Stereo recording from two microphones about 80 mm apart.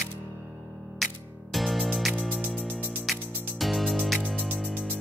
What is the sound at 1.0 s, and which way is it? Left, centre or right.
Music, centre.